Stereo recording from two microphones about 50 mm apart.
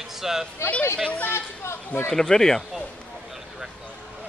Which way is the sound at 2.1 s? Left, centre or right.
Centre.